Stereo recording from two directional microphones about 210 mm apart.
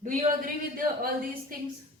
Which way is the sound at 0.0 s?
40° right (ahead or behind).